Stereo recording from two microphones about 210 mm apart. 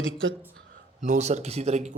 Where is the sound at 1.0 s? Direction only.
30° right (ahead or behind).